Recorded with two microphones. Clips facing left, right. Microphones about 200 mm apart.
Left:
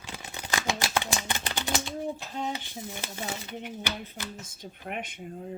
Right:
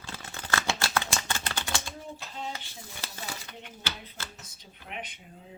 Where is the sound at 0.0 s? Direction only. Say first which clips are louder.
Left 1 dB; 15° left (ahead or behind).